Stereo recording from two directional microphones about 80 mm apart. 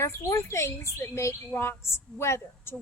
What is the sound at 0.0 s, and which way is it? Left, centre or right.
Speech, left.